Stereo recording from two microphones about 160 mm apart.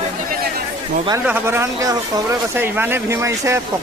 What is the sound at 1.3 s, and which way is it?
Speech, 15° right (ahead or behind).